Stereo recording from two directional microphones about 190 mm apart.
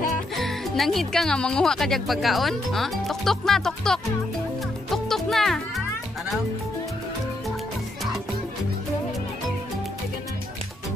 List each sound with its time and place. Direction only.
0.4 s speech: centre (ahead or behind)
4.9 s music: centre (ahead or behind)